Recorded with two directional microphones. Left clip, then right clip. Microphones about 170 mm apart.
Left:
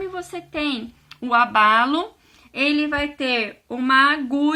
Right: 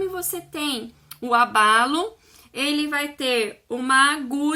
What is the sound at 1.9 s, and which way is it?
Speech, 20° left (ahead or behind).